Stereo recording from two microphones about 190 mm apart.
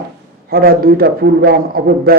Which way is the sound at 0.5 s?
50° right (ahead or behind).